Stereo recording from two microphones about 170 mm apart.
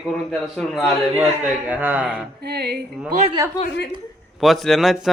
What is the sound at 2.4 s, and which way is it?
Music, 70° right (ahead or behind).